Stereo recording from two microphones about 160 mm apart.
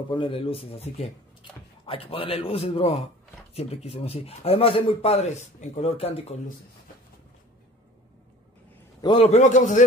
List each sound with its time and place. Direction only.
0.1 s speech: 35° left (ahead or behind)
9.0 s speech: 30° left (ahead or behind)
9.3 s a man's voice: 50° left (ahead or behind)